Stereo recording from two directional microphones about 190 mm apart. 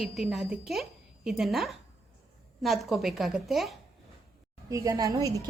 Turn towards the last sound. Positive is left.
turn(degrees=-15)  # may be behind; listen again after turning